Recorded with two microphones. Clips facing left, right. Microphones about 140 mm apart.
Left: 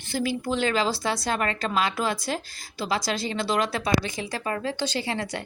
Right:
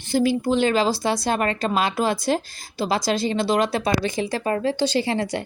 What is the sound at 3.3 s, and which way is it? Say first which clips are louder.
Speech: right 3 dB; 20° right (ahead or behind).